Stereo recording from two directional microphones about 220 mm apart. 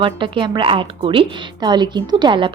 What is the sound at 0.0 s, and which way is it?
Speech, 20° right (ahead or behind).